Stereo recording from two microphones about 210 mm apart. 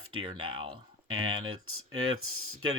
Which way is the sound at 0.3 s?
25° right (ahead or behind).